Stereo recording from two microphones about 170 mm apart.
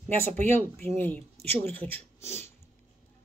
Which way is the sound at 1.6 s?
10° left (ahead or behind).